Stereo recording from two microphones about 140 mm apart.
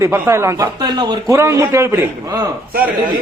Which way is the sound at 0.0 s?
20° right (ahead or behind).